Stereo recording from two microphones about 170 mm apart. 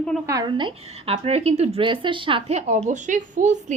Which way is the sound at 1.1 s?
40° right (ahead or behind).